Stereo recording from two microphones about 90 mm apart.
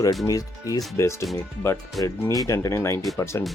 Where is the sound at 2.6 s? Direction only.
30° left (ahead or behind).